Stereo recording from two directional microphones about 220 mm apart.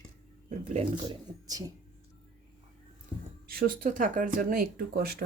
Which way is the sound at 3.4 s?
40° right (ahead or behind).